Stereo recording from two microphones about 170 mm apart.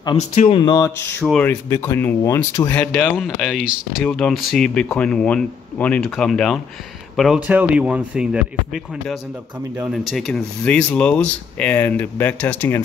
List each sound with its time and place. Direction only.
0.2 s speech: 40° left (ahead or behind); by 1.0 s 20° left (ahead or behind)
1.2 s speech: 5° left (ahead or behind)